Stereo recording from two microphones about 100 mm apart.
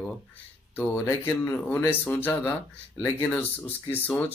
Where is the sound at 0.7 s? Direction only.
25° left (ahead or behind).